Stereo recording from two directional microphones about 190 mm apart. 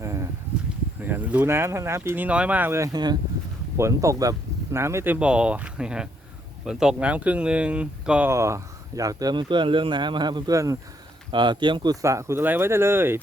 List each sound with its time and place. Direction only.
1.0 s speech: 10° right (ahead or behind)